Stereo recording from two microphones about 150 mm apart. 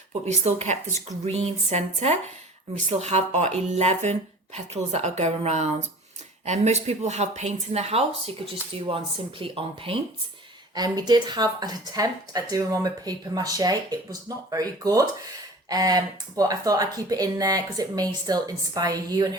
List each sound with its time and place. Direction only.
0.1 s speech: 50° right (ahead or behind)
10.8 s speech: 25° right (ahead or behind)